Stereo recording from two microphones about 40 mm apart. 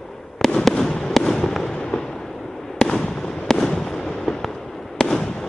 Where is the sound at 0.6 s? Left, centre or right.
Centre.